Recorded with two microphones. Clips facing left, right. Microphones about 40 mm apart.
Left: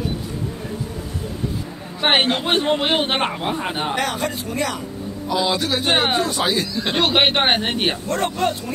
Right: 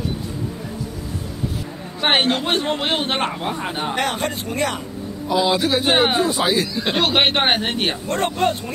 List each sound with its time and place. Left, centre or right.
2.0 s a man's voice: centre
3.9 s speech: right
5.3 s speech: centre
8.4 s speech: centre